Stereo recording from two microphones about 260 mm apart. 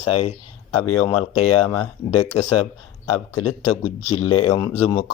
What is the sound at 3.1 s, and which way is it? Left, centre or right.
Speech, left.